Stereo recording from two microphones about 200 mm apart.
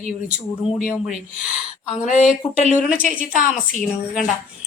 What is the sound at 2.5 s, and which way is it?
Speech, 35° left (ahead or behind).